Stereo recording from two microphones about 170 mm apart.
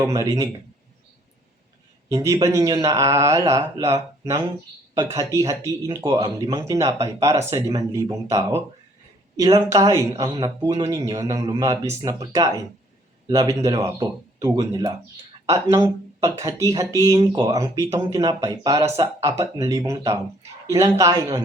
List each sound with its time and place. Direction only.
0.2 s speech: 20° right (ahead or behind)
2.0 s speech: 15° right (ahead or behind)
4.9 s speech: 15° right (ahead or behind)
6.1 s speech: 30° right (ahead or behind)
6.5 s speech: 20° right (ahead or behind)
17.2 s speech: 30° right (ahead or behind)
17.5 s speech: 15° right (ahead or behind)